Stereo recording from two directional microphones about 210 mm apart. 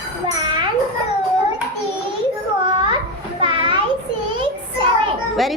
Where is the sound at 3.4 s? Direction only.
20° right (ahead or behind).